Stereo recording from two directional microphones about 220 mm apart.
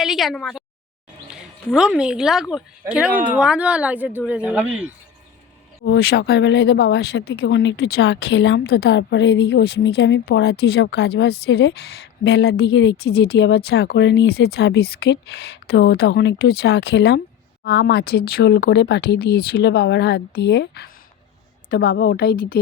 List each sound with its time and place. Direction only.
0.0 s speech: centre (ahead or behind)
1.7 s speech: 5° right (ahead or behind)
5.8 s speech: 50° left (ahead or behind)